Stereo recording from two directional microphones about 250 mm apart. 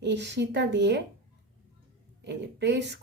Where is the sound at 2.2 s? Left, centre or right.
Right.